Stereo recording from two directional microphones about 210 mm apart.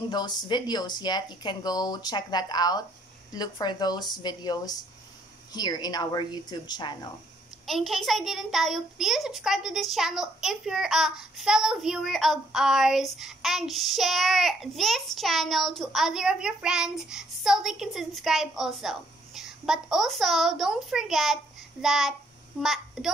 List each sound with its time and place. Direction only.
0.1 s speech: 20° left (ahead or behind)
7.6 s a child's voice: centre (ahead or behind)